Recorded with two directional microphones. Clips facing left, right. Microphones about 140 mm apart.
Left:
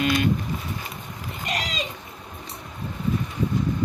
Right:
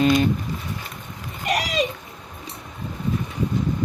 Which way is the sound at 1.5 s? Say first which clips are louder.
Right 7 dB; 70° right (ahead or behind).